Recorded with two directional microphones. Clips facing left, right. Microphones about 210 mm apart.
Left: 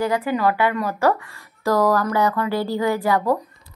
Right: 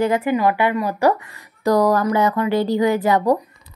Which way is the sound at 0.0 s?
20° right (ahead or behind).